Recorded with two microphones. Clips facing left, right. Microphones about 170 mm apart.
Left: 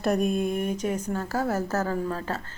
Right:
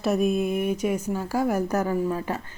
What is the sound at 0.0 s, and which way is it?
Speech, centre (ahead or behind).